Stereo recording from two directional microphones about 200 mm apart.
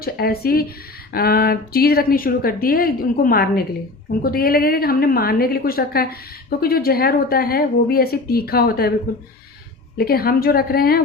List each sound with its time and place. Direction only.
0.0 s speech: 50° left (ahead or behind)
10.0 s speech: 50° left (ahead or behind)